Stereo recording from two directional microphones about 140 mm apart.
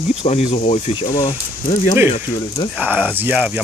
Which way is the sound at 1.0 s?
30° left (ahead or behind).